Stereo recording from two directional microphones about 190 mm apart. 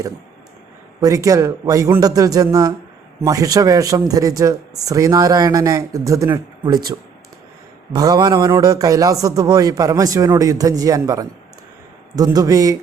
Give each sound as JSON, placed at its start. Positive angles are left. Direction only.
{"t": 1.0, "sound": "speech", "side_deg": -15}
{"t": 7.9, "sound": "a man's voice", "side_deg": -20}